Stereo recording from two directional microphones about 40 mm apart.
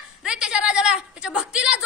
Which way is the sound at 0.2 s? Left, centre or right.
Right.